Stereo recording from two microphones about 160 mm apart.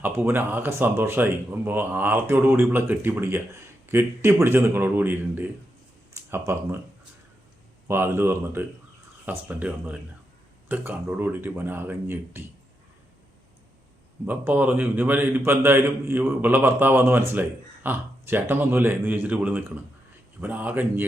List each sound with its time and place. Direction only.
0.0 s speech: 10° right (ahead or behind)
7.9 s speech: 15° right (ahead or behind)
14.3 s speech: 10° right (ahead or behind)